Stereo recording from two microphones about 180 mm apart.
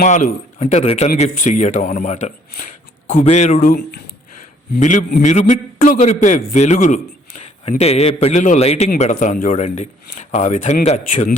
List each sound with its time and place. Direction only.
0.0 s a man's voice: 50° left (ahead or behind)
4.4 s a sound: 45° left (ahead or behind)
5.2 s a man's voice: 45° left (ahead or behind)